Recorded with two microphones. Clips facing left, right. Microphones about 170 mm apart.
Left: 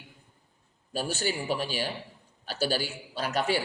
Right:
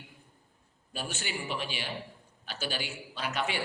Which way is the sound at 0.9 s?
40° left (ahead or behind).